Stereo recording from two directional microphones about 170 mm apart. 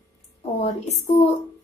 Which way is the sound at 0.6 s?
40° left (ahead or behind).